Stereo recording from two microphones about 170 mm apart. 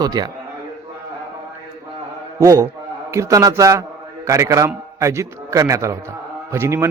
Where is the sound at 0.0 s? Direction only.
20° right (ahead or behind).